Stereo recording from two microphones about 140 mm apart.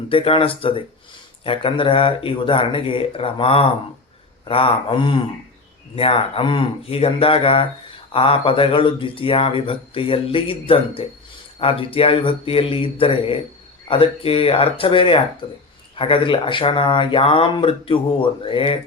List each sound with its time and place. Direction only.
0.1 s speech: 40° left (ahead or behind)